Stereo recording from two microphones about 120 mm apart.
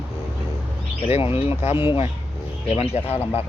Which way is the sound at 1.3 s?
55° left (ahead or behind).